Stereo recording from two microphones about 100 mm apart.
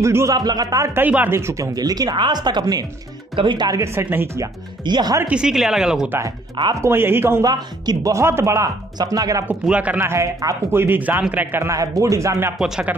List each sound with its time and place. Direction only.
0.0 s a man's voice: 30° right (ahead or behind)
0.4 s speech: 40° right (ahead or behind)
0.9 s speech: 20° right (ahead or behind); by 3.8 s 45° right (ahead or behind)
3.8 s a man's voice: 25° right (ahead or behind)
4.8 s speech: 50° right (ahead or behind)
5.2 s speech: 10° right (ahead or behind)
6.0 s a man's voice: 25° right (ahead or behind)
7.4 s speech: 40° right (ahead or behind)
8.1 s a man's voice: 25° right (ahead or behind)
8.9 s speech: 40° right (ahead or behind)
9.5 s speech: 15° right (ahead or behind)
9.9 s a man's voice: 30° right (ahead or behind)
11.6 s speech: 35° right (ahead or behind)
12.5 s speech: 5° right (ahead or behind)